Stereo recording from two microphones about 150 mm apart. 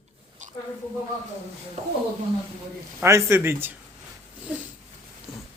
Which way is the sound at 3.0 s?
20° right (ahead or behind).